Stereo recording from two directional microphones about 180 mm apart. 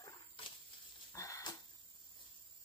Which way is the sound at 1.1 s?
20° left (ahead or behind).